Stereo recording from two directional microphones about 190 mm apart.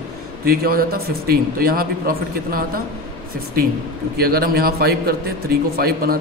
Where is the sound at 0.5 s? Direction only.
50° right (ahead or behind).